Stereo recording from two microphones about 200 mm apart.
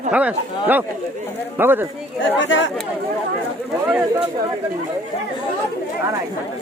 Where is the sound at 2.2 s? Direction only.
70° left (ahead or behind).